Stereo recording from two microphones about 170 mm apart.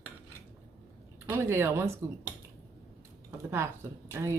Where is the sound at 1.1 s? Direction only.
10° right (ahead or behind).